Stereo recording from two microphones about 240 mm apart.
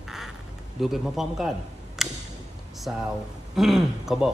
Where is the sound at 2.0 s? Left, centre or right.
Centre.